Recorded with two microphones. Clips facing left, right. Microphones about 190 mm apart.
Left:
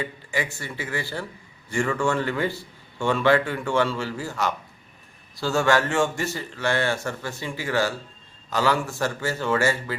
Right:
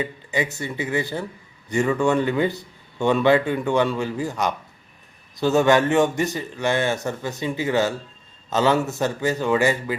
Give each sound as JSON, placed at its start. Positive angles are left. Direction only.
{"t": 0.0, "sound": "a man's voice", "side_deg": -20}